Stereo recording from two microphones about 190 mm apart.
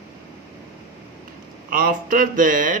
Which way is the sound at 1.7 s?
45° right (ahead or behind).